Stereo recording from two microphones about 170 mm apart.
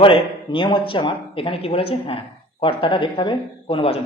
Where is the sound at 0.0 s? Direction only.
30° left (ahead or behind).